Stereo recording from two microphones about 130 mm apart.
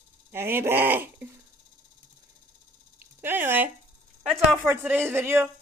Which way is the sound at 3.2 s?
15° right (ahead or behind).